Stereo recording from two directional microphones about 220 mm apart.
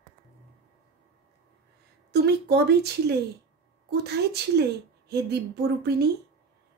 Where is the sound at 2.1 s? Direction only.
45° right (ahead or behind).